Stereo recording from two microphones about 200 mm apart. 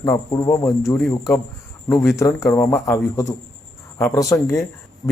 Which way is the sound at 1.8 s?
10° left (ahead or behind).